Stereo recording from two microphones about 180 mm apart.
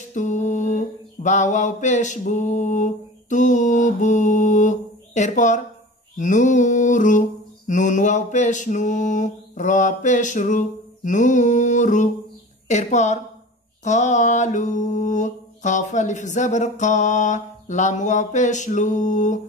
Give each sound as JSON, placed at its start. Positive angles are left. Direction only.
{"t": 0.1, "sound": "mantra", "side_deg": 45}
{"t": 12.6, "sound": "a woman's voice", "side_deg": 40}
{"t": 13.8, "sound": "mantra", "side_deg": 40}